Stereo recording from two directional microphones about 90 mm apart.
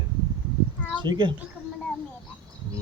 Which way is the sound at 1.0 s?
55° right (ahead or behind).